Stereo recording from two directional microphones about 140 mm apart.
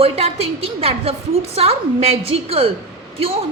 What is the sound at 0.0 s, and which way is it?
A woman's voice, 45° right (ahead or behind).